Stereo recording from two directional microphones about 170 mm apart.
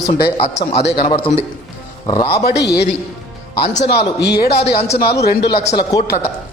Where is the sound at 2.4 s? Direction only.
75° left (ahead or behind).